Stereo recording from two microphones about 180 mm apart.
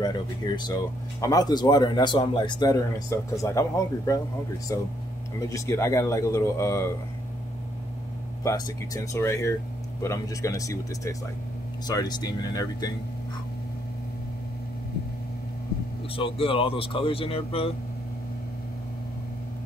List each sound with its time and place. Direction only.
0.5 s speech: 20° left (ahead or behind)
8.5 s speech: 20° left (ahead or behind)
16.2 s speech: 30° left (ahead or behind)